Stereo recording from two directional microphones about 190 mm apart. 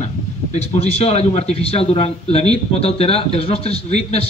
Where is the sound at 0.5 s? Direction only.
35° left (ahead or behind).